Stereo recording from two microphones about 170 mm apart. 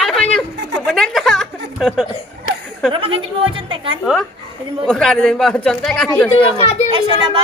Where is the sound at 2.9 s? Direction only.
30° right (ahead or behind).